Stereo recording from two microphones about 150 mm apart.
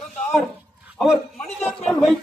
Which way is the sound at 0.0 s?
5° left (ahead or behind).